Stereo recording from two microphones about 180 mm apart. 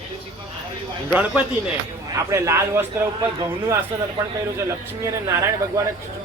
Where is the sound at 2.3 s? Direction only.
15° right (ahead or behind).